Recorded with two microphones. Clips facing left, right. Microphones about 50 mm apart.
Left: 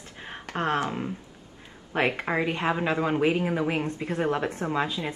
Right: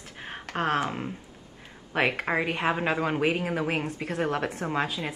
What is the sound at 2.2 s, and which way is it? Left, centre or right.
Speech, centre.